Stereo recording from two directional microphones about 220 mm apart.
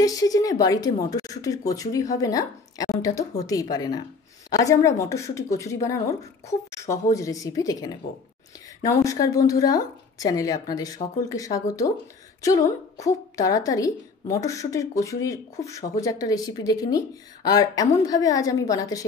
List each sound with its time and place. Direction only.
0.0 s speech: 15° left (ahead or behind)